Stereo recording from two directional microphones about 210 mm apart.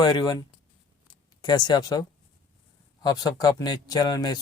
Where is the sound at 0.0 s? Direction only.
20° left (ahead or behind).